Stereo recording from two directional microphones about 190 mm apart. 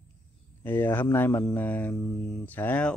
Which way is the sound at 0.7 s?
10° left (ahead or behind).